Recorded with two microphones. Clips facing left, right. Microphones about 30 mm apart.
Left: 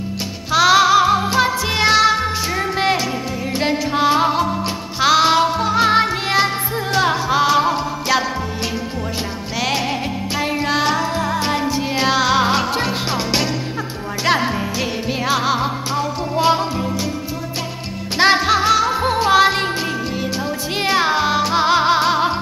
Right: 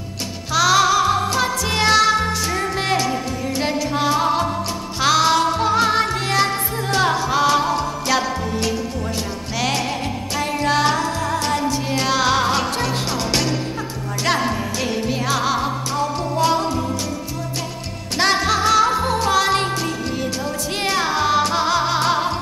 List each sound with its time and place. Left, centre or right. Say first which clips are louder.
0.5 s music: left 3 dB; centre
11.1 s music: left 2 dB; left
18.1 s music: left 4 dB; centre